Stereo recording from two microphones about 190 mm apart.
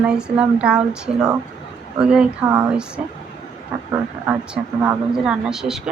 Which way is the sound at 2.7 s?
5° right (ahead or behind).